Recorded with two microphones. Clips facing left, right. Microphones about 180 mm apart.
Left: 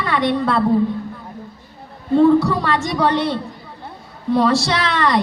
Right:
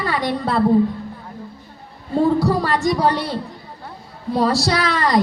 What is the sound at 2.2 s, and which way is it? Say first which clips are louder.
Speech: left 3 dB; 35° right (ahead or behind).